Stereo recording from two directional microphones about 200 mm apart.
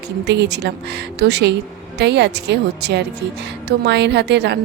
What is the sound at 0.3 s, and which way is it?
A woman's voice, 60° right (ahead or behind).